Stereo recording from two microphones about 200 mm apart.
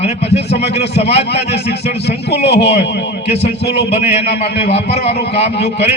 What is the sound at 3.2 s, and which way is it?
A man's voice, 30° left (ahead or behind).